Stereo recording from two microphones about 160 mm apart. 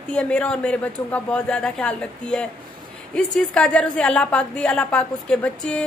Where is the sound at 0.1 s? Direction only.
5° left (ahead or behind).